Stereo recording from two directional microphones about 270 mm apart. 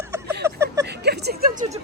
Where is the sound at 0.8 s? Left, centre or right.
Right.